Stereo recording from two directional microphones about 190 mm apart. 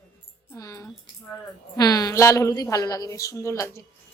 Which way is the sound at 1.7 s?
20° left (ahead or behind).